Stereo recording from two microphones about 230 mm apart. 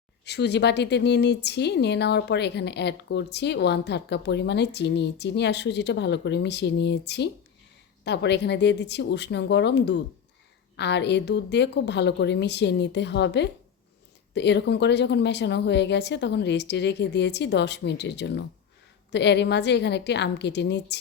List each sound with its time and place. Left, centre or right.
0.3 s speech: left